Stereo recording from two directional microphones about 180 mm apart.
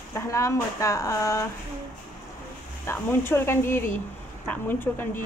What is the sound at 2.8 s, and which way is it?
A woman's voice, 15° left (ahead or behind).